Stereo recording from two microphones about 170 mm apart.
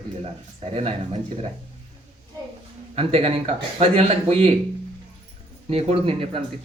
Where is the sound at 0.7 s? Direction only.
35° right (ahead or behind).